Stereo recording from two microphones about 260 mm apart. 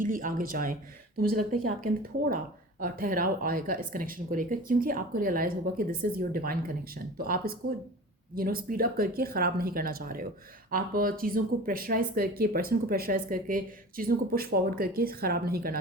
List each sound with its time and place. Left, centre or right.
0.0 s speech: right